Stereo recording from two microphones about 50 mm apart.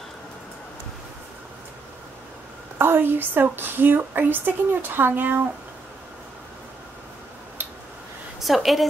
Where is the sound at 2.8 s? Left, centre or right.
Right.